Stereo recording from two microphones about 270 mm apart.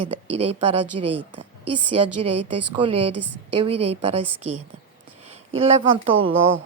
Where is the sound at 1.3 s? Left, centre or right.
Right.